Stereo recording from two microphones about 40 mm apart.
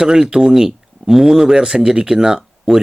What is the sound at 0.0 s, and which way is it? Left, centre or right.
Speech, centre.